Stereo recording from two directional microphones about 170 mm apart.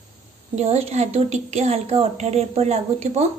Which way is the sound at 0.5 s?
40° right (ahead or behind).